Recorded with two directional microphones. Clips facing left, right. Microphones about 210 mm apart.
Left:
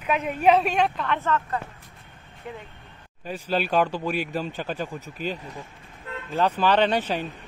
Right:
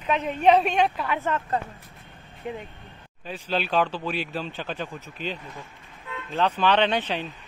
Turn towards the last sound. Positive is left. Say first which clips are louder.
# left 1 dB
turn(degrees=10)  # may be behind; listen again after turning